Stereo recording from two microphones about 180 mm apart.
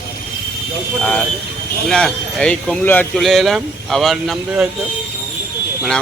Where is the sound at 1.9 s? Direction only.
5° left (ahead or behind).